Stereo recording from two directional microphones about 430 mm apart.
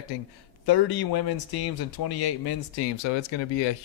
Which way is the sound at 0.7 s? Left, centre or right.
Left.